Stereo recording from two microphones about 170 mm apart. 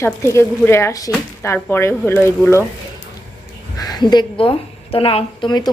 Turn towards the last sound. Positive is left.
turn(degrees=25)  # may be behind; listen again after turning